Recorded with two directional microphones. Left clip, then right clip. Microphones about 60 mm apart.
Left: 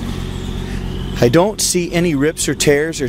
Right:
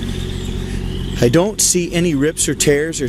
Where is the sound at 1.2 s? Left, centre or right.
Centre.